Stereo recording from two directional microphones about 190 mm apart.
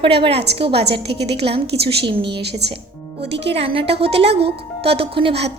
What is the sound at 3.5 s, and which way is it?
A woman's voice, 30° right (ahead or behind).